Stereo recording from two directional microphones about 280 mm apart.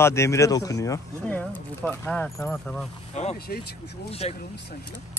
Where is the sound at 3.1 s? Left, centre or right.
Left.